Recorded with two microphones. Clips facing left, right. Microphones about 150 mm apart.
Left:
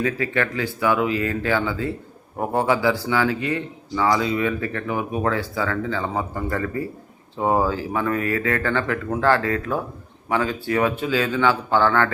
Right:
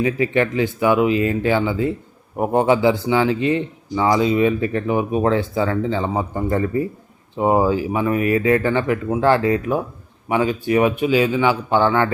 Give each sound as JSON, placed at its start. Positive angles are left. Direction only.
{"t": 0.0, "sound": "speech", "side_deg": -20}